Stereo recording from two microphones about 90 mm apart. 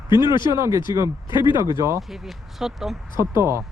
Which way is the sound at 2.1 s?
5° right (ahead or behind).